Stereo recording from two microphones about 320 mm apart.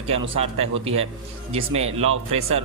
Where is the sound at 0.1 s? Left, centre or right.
Centre.